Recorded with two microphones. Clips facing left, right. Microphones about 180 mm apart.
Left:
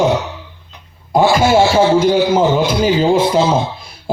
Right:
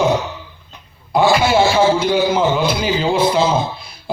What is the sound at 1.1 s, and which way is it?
A man's voice, 45° left (ahead or behind).